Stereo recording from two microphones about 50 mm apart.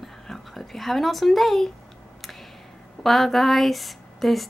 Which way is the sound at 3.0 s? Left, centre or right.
Centre.